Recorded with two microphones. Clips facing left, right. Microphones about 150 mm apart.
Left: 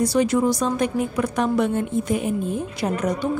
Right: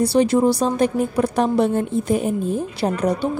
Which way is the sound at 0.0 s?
30° right (ahead or behind).